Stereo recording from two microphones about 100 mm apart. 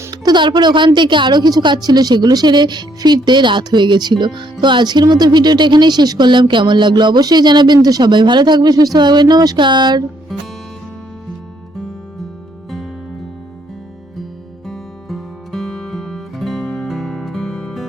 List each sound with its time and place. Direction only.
0.1 s a sound: 50° right (ahead or behind)
0.9 s speech: 50° right (ahead or behind)
14.7 s music: centre (ahead or behind)